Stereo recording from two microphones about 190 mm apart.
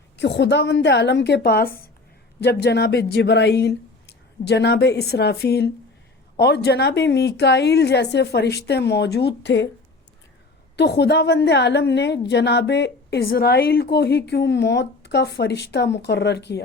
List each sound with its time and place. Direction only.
0.2 s a woman's voice: 65° left (ahead or behind)
10.8 s a woman's voice: 60° left (ahead or behind)